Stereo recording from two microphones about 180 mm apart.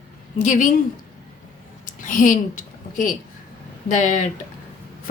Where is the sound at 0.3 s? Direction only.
45° left (ahead or behind).